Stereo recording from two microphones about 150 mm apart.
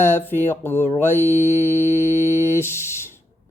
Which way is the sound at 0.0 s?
15° left (ahead or behind).